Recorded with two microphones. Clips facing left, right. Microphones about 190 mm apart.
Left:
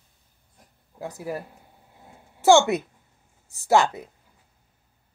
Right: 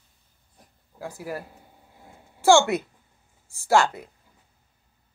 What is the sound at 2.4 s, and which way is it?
Speech, 20° left (ahead or behind).